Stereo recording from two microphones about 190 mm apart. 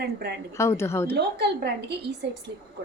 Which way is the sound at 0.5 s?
15° left (ahead or behind).